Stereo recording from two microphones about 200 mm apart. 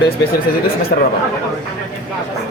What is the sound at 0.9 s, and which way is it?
Speech, 45° left (ahead or behind).